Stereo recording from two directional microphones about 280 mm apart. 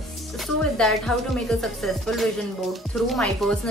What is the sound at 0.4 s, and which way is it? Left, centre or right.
A woman's voice, centre.